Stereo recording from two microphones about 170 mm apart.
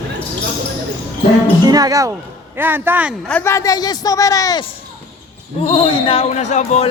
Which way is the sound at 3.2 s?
10° left (ahead or behind).